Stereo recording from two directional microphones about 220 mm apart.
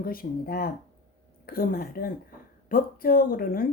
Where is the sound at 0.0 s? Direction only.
40° left (ahead or behind).